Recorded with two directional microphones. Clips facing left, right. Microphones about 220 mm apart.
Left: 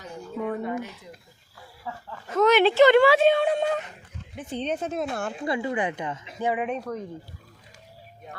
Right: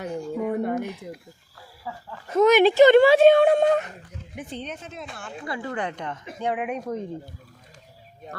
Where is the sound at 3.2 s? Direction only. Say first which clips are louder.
Right 6 dB; 50° right (ahead or behind).